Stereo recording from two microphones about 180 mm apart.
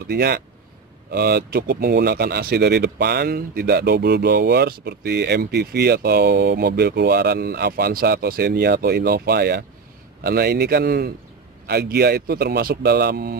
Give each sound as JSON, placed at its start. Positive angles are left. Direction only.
{"t": 0.0, "sound": "speech", "side_deg": -65}